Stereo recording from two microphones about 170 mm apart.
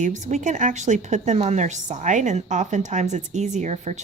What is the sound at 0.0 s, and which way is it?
A woman's voice, 45° right (ahead or behind).